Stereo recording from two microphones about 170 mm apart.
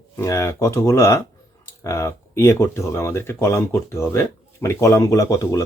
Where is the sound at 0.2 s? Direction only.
20° left (ahead or behind).